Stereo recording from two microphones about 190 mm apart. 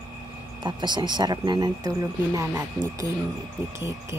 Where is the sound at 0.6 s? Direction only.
25° right (ahead or behind).